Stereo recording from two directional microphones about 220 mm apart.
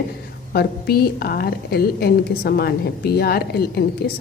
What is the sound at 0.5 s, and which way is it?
A woman's voice, 45° left (ahead or behind).